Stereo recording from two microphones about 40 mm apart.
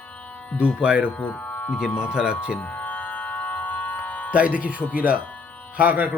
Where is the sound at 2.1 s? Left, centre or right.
Right.